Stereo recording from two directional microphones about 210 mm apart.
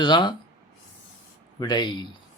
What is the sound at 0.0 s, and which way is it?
Speech, 20° left (ahead or behind).